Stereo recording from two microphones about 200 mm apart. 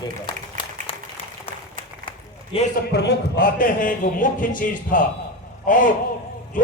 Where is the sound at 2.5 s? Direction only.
25° left (ahead or behind).